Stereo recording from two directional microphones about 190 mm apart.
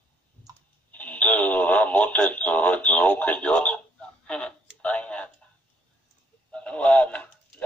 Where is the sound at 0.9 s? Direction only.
10° left (ahead or behind).